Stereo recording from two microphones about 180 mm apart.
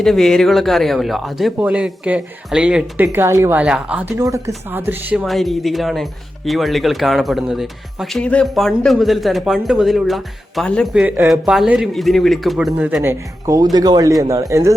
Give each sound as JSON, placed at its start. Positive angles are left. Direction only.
{"t": 0.0, "sound": "speech", "side_deg": 0}
{"t": 13.0, "sound": "speech", "side_deg": -15}